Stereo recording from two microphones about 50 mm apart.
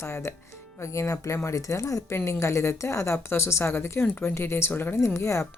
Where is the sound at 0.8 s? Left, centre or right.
Left.